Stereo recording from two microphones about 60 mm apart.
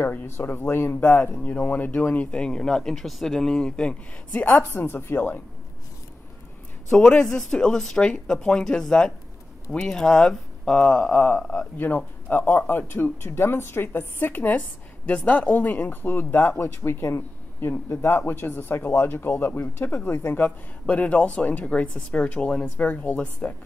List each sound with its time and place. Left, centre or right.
0.1 s speech: left
0.9 s speech: left
4.4 s speech: left
6.9 s speech: centre; by 20.5 s left
20.8 s speech: left